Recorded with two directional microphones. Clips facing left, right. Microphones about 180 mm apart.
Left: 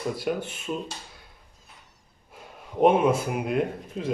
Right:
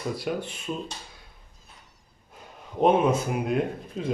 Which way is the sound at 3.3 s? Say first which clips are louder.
Even; centre (ahead or behind).